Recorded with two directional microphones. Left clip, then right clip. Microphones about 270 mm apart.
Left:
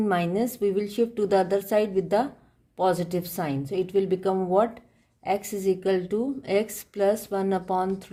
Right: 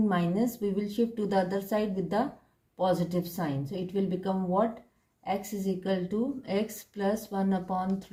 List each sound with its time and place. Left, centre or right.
0.1 s a woman's voice: left